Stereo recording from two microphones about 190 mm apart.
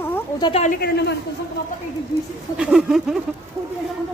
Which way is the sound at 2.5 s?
5° right (ahead or behind).